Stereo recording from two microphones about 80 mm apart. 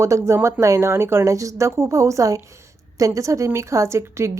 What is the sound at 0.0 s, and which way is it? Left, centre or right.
A woman's voice, right.